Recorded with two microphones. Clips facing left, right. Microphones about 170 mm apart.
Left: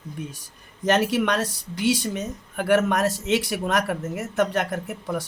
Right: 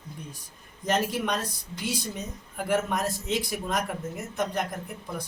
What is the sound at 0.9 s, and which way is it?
A woman's voice, 75° left (ahead or behind).